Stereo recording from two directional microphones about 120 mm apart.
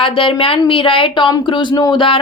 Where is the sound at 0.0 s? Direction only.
45° left (ahead or behind).